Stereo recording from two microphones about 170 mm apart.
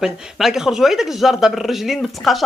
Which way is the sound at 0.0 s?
5° right (ahead or behind).